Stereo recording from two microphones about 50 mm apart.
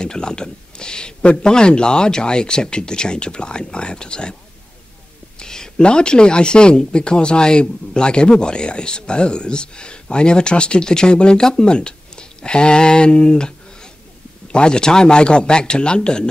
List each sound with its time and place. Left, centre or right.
0.0 s a man's voice: centre
5.4 s a man's voice: centre